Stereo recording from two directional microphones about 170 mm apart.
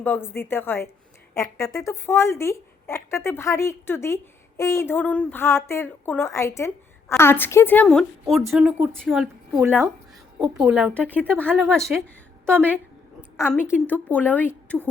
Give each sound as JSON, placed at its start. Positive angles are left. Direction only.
{"t": 0.0, "sound": "a woman's voice", "side_deg": 10}
{"t": 8.2, "sound": "a woman's voice", "side_deg": 0}
{"t": 11.7, "sound": "speech", "side_deg": 5}
{"t": 12.5, "sound": "a woman's voice", "side_deg": -10}
{"t": 13.5, "sound": "a woman's voice", "side_deg": 10}